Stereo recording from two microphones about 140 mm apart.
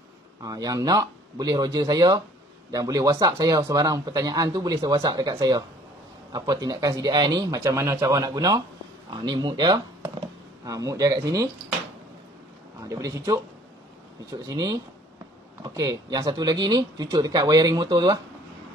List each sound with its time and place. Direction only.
0.4 s speech: 25° right (ahead or behind)
12.8 s speech: 25° right (ahead or behind)
14.4 s speech: 25° right (ahead or behind)